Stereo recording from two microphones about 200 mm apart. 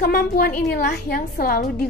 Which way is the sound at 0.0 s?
45° left (ahead or behind).